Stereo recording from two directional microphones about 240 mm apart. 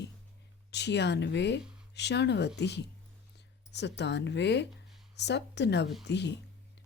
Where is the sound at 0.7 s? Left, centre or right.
Left.